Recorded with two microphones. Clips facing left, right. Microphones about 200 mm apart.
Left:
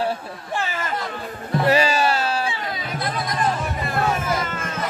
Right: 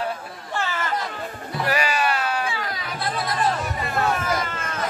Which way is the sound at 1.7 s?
25° left (ahead or behind).